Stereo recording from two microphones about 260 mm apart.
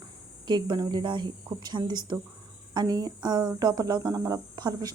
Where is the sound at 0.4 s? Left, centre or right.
Centre.